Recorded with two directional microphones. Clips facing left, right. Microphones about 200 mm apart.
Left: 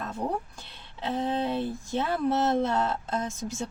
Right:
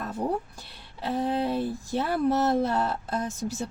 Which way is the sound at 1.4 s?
10° right (ahead or behind).